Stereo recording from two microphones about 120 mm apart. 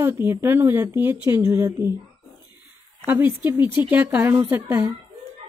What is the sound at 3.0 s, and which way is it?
A woman's voice, 15° right (ahead or behind).